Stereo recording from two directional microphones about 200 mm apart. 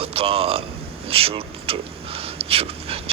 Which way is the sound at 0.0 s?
30° right (ahead or behind).